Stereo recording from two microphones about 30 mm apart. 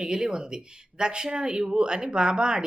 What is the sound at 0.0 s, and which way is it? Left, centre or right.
Speech, right.